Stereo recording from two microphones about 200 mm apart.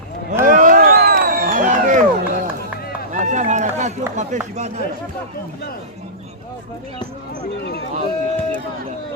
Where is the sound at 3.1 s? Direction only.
40° right (ahead or behind).